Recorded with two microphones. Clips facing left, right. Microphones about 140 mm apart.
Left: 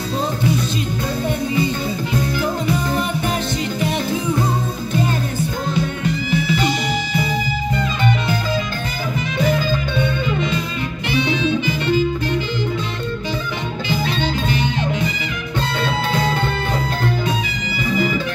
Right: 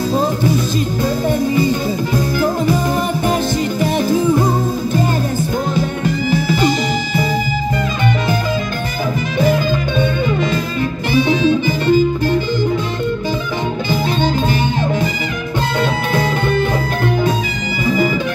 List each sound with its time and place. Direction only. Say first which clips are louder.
2.6 s music: right 4 dB; 40° right (ahead or behind)
11.1 s music: right 5 dB; 40° right (ahead or behind)